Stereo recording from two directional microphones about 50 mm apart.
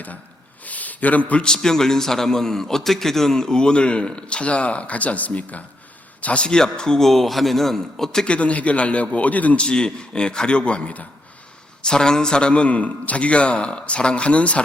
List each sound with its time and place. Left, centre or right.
0.6 s a sound: left
1.3 s a man's voice: centre
8.3 s a man's voice: left
9.6 s a man's voice: centre